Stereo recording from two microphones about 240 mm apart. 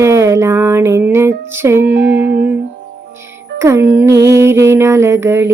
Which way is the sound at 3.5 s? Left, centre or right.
Centre.